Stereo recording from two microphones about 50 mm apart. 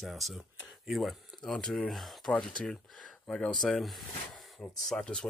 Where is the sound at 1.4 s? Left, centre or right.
Centre.